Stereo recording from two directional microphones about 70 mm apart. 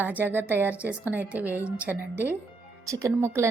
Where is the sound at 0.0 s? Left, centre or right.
Right.